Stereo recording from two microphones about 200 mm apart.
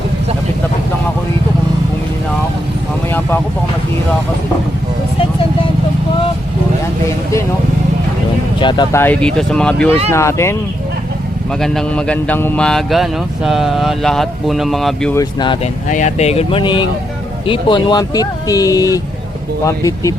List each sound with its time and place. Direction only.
8.6 s a man's voice: 20° left (ahead or behind)
11.6 s a man's voice: centre (ahead or behind)
15.1 s speech: 20° left (ahead or behind)
15.9 s speech: 40° left (ahead or behind); by 20.1 s 15° left (ahead or behind)